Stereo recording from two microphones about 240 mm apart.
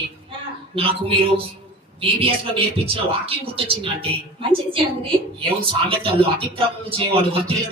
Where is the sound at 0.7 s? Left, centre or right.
Right.